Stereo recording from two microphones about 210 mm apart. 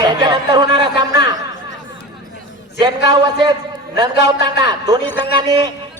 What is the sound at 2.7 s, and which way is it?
Speech, 25° right (ahead or behind).